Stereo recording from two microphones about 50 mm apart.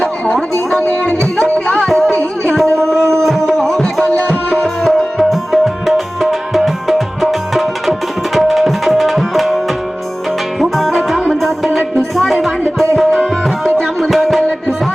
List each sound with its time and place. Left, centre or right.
1.5 s music: left
1.8 s music: centre
2.6 s a sound: centre
3.2 s music: centre
8.4 s tabla: centre
10.6 s music: centre
13.0 s tabla: centre
14.0 s music: centre